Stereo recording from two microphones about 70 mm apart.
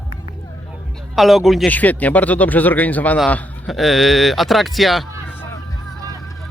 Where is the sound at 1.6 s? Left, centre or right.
Left.